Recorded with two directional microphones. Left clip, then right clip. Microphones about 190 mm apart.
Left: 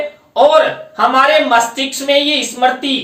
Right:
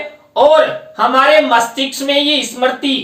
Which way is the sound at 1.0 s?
20° left (ahead or behind).